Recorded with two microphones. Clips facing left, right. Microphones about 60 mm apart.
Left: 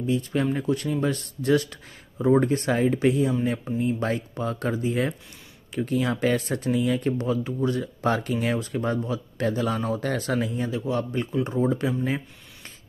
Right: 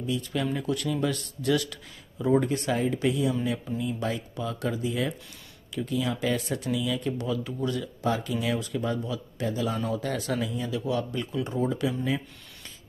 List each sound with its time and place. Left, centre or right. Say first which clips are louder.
0.0 s speech: left 5 dB; left
8.0 s speech: left 3 dB; left
9.4 s speech: left 4 dB; left
9.8 s speech: left 3 dB; left